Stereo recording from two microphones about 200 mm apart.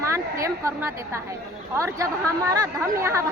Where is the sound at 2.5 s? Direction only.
15° right (ahead or behind).